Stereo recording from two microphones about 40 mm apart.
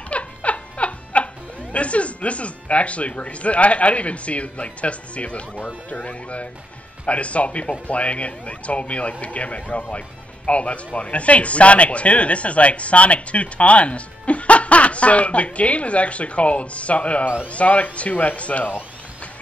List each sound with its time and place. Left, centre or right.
0.1 s speech: left